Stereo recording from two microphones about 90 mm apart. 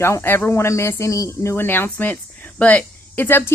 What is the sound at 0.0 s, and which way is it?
A woman's voice, 25° left (ahead or behind).